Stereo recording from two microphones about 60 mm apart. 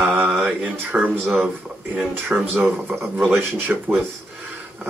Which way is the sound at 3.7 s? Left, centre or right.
Right.